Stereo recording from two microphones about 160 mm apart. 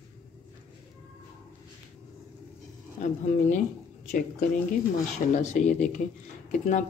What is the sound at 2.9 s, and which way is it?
Speech, 50° left (ahead or behind).